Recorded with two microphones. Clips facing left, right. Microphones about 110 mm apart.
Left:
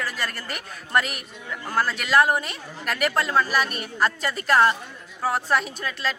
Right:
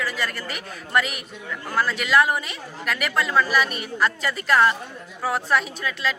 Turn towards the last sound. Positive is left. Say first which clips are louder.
# right 2 dB
turn(degrees=40)  # may be behind; listen again after turning